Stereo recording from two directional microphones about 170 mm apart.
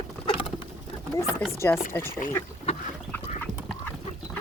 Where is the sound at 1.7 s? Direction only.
10° left (ahead or behind).